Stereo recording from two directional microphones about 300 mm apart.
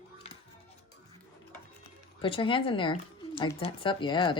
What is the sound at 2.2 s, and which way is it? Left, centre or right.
Speech, centre.